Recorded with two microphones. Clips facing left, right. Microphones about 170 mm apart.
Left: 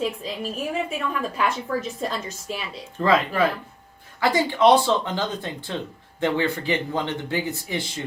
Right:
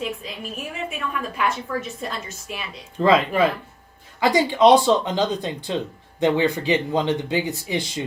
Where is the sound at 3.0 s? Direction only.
15° right (ahead or behind).